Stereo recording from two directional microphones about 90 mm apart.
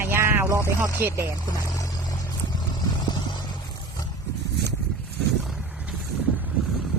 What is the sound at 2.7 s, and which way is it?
Vehicle, 55° left (ahead or behind).